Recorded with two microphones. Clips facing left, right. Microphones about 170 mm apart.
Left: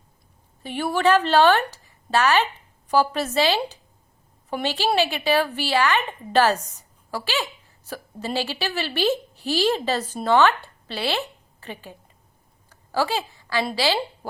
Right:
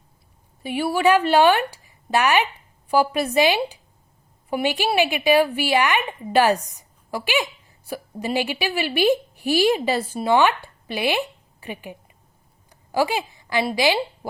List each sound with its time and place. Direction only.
0.6 s a woman's voice: 10° right (ahead or behind)
12.7 s a sound: 15° right (ahead or behind)
13.7 s speech: 15° right (ahead or behind)